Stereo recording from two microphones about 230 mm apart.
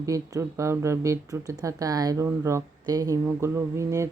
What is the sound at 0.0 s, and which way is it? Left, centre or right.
Speech, centre.